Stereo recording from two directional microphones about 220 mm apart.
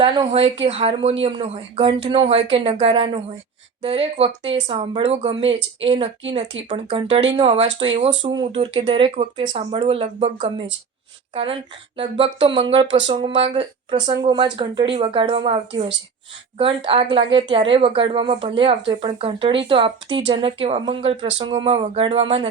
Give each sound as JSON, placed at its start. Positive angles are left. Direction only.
{"t": 0.0, "sound": "a woman's voice", "side_deg": -20}
{"t": 11.9, "sound": "a woman's voice", "side_deg": -25}